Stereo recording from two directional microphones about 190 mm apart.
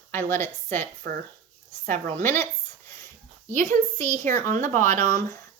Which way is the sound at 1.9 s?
40° right (ahead or behind).